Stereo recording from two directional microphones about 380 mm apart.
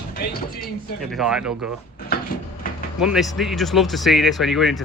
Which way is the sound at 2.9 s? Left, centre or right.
Centre.